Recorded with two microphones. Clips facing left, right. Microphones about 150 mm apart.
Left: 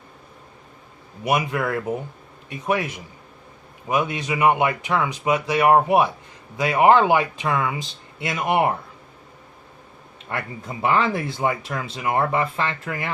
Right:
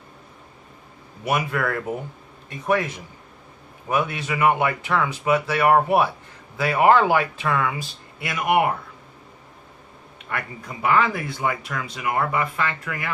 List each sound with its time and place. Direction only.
1.2 s speech: 15° left (ahead or behind)
10.2 s speech: 25° left (ahead or behind)